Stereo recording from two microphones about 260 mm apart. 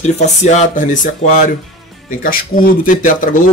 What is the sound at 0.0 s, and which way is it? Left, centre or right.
Speech, left.